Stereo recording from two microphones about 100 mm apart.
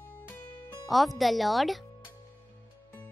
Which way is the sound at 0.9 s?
Centre (ahead or behind).